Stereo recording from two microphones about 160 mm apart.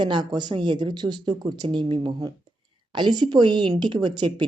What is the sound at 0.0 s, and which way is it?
Speech, 25° right (ahead or behind).